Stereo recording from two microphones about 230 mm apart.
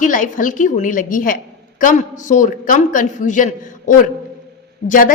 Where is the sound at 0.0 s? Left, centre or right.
Left.